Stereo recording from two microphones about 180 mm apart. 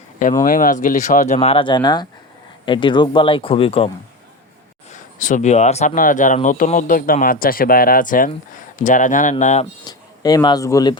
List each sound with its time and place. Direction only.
0.4 s speech: 50° left (ahead or behind); by 3.9 s 30° left (ahead or behind)
5.2 s speech: 45° left (ahead or behind)
9.8 s speech: 20° left (ahead or behind)